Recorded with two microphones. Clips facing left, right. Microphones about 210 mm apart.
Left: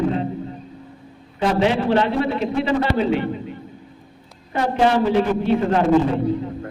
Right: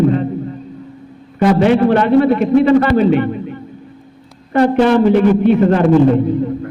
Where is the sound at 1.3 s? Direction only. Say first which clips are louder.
Right 7 dB; 55° right (ahead or behind).